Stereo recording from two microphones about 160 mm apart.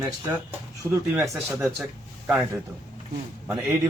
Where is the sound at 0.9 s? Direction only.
20° right (ahead or behind).